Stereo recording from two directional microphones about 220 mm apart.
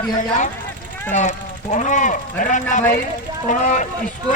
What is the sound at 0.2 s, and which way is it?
Speech, 35° left (ahead or behind).